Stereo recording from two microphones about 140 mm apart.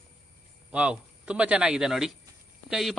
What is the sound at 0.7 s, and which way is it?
A man's voice, 10° right (ahead or behind).